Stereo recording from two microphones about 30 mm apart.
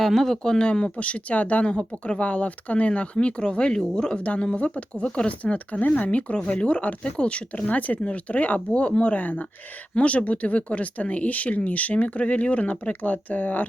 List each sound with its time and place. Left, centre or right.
0.0 s speech: centre
0.6 s speech: left
0.9 s speech: left
1.4 s speech: left
1.6 s speech: left
2.2 s speech: left
4.2 s speech: left
6.0 s speech: left
6.3 s speech: left
8.7 s speech: left
9.1 s speech: left
10.0 s speech: left
13.0 s speech: left